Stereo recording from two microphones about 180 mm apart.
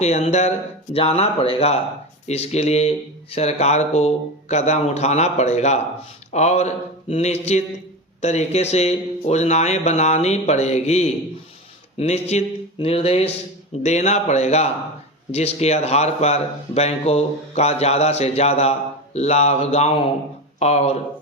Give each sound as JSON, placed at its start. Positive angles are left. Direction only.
{"t": 0.0, "sound": "speech", "side_deg": 40}